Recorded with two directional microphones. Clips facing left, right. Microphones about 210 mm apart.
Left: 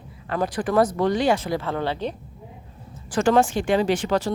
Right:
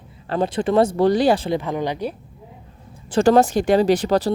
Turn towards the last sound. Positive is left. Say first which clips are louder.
# right 4 dB
turn(degrees=-35)  # may be behind; listen again after turning